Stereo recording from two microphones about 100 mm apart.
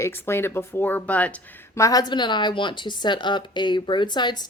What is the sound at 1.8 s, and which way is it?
Speech, 35° left (ahead or behind).